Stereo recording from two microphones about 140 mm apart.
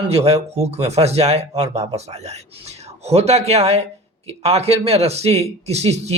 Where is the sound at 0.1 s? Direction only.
45° right (ahead or behind).